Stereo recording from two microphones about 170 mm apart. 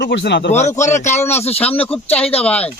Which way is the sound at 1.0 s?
40° left (ahead or behind).